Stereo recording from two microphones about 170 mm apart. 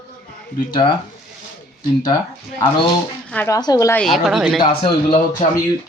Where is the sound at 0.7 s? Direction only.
30° left (ahead or behind).